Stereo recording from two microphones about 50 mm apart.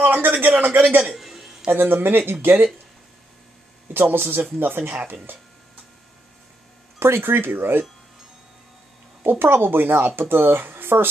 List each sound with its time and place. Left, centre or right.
0.0 s speech: right
1.1 s a sound: centre
1.7 s speech: right
3.9 s speech: right
7.0 s speech: right
9.2 s speech: right